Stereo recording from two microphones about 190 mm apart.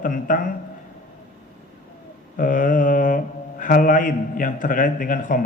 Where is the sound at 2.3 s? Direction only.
45° left (ahead or behind).